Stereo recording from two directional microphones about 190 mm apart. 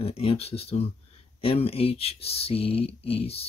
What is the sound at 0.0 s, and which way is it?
Speech, 30° left (ahead or behind).